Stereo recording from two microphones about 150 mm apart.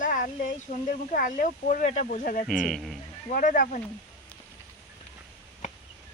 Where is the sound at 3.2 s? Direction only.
60° left (ahead or behind).